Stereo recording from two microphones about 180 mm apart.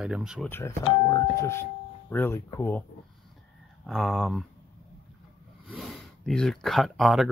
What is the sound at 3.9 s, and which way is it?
Speech, centre (ahead or behind).